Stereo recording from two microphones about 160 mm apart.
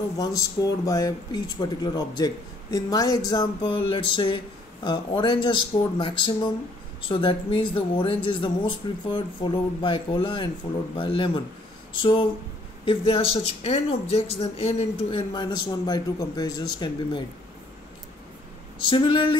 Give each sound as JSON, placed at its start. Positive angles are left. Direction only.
{"t": 0.2, "sound": "speech", "side_deg": 25}
{"t": 18.9, "sound": "speech", "side_deg": 30}